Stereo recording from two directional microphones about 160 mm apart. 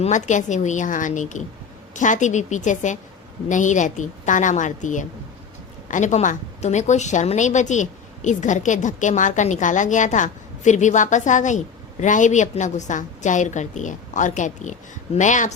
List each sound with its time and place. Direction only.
0.0 s a woman's voice: 50° left (ahead or behind)